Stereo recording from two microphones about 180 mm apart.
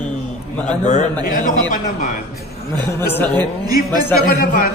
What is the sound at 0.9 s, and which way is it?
A man's voice, 45° left (ahead or behind).